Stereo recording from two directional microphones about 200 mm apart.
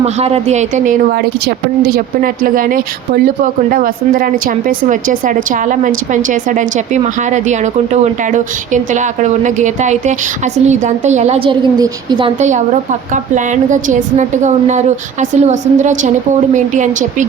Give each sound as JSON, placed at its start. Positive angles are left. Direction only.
{"t": 0.0, "sound": "speech", "side_deg": -30}
{"t": 12.4, "sound": "speech", "side_deg": -35}